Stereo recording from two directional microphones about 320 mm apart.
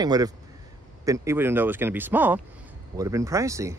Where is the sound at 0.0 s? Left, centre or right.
Centre.